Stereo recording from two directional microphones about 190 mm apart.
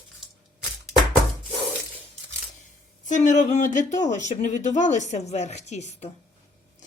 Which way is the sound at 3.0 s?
40° left (ahead or behind).